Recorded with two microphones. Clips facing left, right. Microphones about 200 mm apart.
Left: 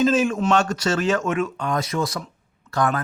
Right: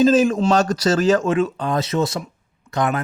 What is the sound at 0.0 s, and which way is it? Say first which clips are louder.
Speech: right 4 dB; 35° right (ahead or behind).